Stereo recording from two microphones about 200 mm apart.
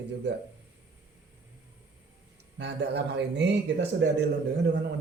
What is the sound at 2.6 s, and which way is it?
A man's voice, 60° right (ahead or behind).